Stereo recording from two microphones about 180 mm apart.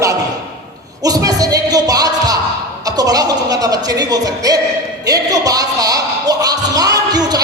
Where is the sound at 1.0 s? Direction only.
20° right (ahead or behind).